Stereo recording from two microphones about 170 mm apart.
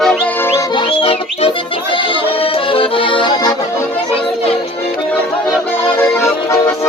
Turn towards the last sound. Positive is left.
turn(degrees=15)  # may be behind; listen again after turning